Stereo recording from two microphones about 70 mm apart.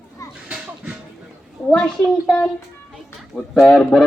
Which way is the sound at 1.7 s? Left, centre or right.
Centre.